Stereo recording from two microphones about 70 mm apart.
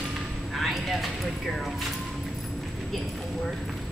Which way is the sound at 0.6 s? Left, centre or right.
Centre.